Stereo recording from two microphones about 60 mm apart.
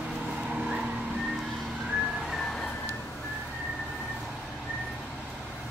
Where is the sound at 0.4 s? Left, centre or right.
Centre.